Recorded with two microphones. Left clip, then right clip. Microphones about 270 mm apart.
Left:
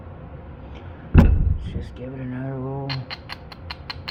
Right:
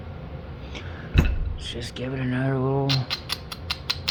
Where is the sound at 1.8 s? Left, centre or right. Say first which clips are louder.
Right 4 dB; right.